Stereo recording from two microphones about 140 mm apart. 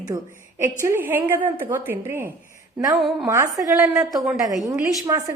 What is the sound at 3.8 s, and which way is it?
Speech, 5° right (ahead or behind).